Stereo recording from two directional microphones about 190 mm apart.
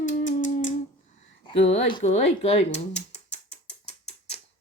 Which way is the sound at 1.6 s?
35° left (ahead or behind).